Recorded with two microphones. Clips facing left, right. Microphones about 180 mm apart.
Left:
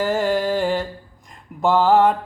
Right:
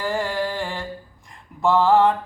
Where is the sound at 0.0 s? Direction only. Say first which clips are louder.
Left 4 dB; 20° left (ahead or behind).